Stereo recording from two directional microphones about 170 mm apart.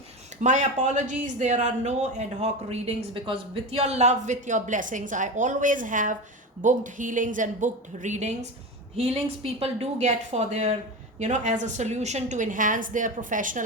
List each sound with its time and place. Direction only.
0.4 s speech: 45° right (ahead or behind)